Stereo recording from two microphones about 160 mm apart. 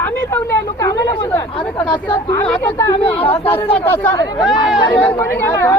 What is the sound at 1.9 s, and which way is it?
Speech, 30° left (ahead or behind).